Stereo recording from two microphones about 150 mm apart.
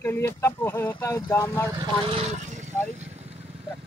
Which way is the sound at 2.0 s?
45° right (ahead or behind).